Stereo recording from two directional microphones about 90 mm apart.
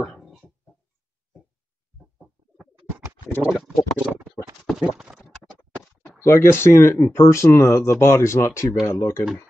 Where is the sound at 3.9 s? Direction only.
15° right (ahead or behind).